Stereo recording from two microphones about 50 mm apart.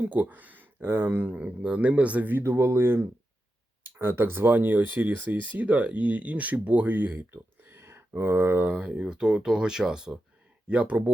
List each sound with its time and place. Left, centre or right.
0.0 s speech: right
2.3 s speech: right
8.6 s speech: right
10.7 s speech: right